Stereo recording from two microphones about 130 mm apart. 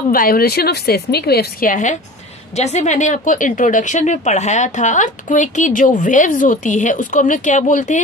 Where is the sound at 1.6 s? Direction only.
80° left.